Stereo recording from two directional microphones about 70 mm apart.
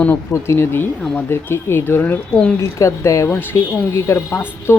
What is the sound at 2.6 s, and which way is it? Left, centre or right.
Speech, left.